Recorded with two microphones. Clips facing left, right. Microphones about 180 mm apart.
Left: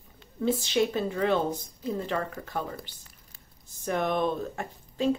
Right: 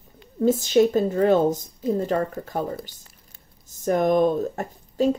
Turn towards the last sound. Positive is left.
turn(degrees=-40)  # may be behind; listen again after turning